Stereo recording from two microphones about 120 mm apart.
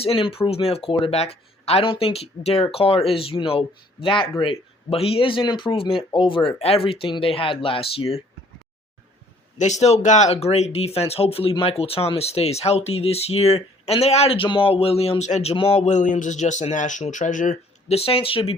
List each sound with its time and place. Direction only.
0.0 s speech: 50° left (ahead or behind)
6.6 s speech: 55° left (ahead or behind)
9.6 s speech: 75° left (ahead or behind); by 15.9 s 55° left (ahead or behind)
15.9 s speech: 90° left; by 18.5 s 50° left (ahead or behind)